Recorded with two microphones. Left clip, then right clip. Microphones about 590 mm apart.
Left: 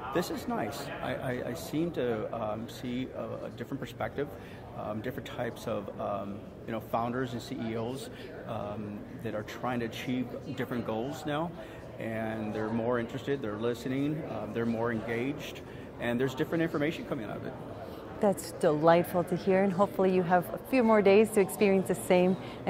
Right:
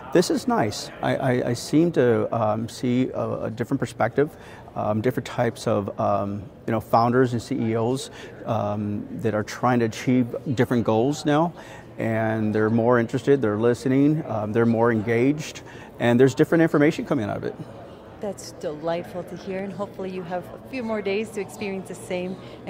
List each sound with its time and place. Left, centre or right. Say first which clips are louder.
0.1 s speech: right 13 dB; right
18.2 s speech: left 4 dB; left